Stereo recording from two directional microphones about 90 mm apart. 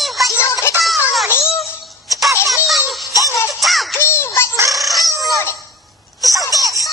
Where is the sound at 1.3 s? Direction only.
30° left (ahead or behind).